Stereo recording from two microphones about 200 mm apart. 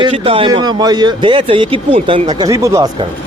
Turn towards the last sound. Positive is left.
turn(degrees=-20)  # may be behind; listen again after turning